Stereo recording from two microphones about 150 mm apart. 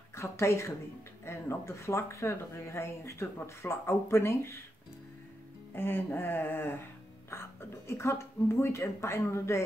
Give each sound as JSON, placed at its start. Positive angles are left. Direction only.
{"t": 0.1, "sound": "speech", "side_deg": 20}
{"t": 5.8, "sound": "speech", "side_deg": 15}